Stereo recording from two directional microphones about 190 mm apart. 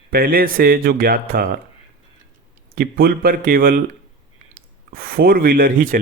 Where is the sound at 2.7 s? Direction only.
50° right (ahead or behind).